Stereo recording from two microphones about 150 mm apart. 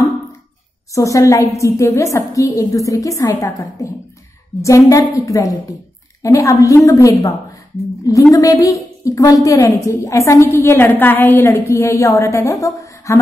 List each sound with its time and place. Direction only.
0.9 s a woman's voice: 20° left (ahead or behind)